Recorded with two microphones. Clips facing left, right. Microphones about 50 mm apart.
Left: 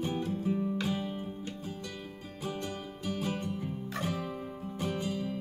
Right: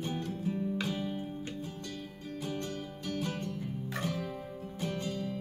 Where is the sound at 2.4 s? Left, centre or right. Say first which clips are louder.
Left 2 dB; centre.